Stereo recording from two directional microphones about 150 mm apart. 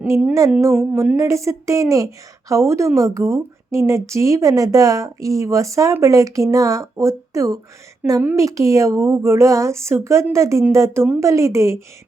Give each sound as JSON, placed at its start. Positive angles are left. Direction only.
{"t": 0.0, "sound": "music", "side_deg": -10}
{"t": 0.6, "sound": "a woman's voice", "side_deg": -15}
{"t": 8.2, "sound": "music", "side_deg": -10}
{"t": 8.4, "sound": "a woman's voice", "side_deg": -20}